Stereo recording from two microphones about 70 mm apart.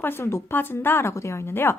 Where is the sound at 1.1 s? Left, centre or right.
Left.